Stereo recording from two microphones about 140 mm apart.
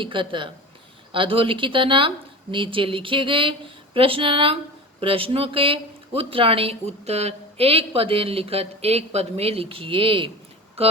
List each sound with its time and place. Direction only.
0.0 s speech: 35° right (ahead or behind)